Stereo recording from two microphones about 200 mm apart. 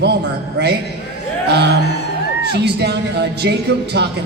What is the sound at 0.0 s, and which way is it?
Speech, 55° right (ahead or behind).